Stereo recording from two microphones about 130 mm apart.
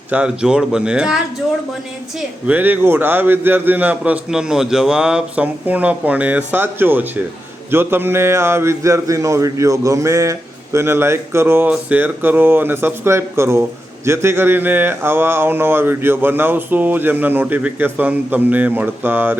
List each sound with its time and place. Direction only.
0.1 s a man's voice: 5° right (ahead or behind)
2.5 s a man's voice: 15° right (ahead or behind)